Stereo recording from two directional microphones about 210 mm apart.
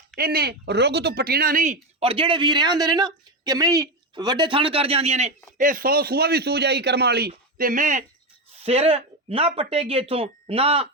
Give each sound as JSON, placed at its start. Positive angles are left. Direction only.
{"t": 0.2, "sound": "speech", "side_deg": -45}